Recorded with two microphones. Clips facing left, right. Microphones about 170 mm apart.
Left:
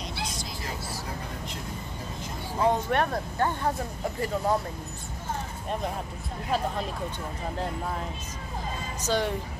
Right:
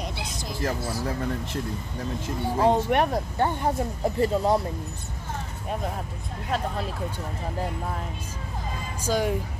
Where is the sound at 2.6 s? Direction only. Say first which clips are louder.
Right 3 dB; 15° right (ahead or behind).